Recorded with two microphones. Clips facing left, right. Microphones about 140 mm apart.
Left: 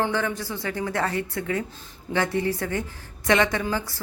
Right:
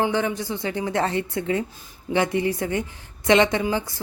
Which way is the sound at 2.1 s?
20° right (ahead or behind).